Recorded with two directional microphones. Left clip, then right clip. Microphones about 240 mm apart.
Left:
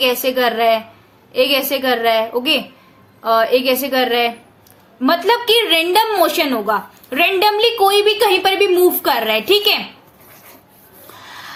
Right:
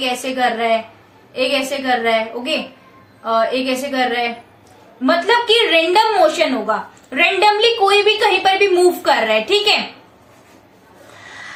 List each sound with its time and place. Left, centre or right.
0.0 s a woman's voice: left